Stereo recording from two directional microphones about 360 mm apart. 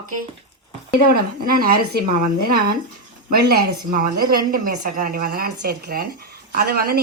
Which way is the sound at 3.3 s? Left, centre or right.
Right.